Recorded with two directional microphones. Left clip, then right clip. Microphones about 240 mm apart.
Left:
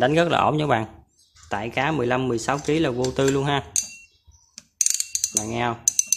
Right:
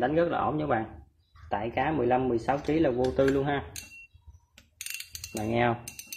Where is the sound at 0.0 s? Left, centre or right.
Left.